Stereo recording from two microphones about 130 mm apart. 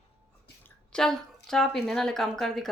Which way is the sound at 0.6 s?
5° left (ahead or behind).